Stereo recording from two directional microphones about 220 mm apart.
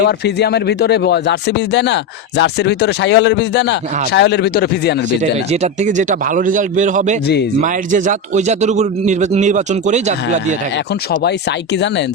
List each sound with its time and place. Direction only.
0.0 s speech: 50° left (ahead or behind)
5.5 s a man's voice: 35° right (ahead or behind)
11.2 s speech: 50° left (ahead or behind)